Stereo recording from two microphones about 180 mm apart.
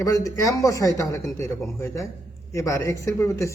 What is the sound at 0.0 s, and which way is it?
Speech, 20° left (ahead or behind).